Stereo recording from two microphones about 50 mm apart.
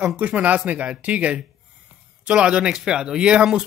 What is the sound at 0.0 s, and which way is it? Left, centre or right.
Speech, right.